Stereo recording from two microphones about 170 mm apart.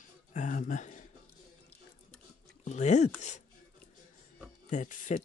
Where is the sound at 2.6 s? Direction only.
45° left (ahead or behind).